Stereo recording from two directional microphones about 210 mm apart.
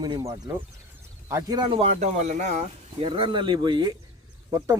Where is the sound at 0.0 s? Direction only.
15° right (ahead or behind).